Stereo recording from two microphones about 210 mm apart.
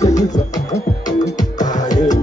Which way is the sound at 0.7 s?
15° left (ahead or behind).